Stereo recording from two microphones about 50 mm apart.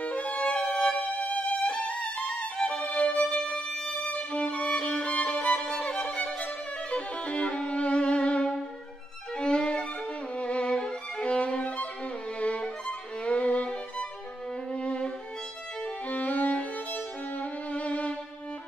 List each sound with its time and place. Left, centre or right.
0.0 s music: left
4.0 s violin: left
15.8 s music: left